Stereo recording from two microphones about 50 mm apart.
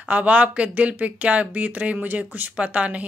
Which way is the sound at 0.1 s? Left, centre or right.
Right.